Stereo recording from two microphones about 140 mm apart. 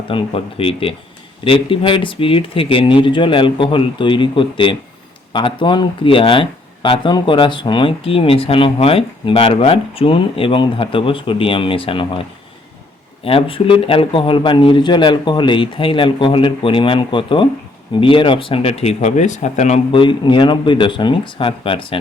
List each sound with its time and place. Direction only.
0.1 s speech: 40° left (ahead or behind)
13.2 s speech: 40° left (ahead or behind); by 19.8 s 55° left (ahead or behind)
19.9 s speech: 35° left (ahead or behind)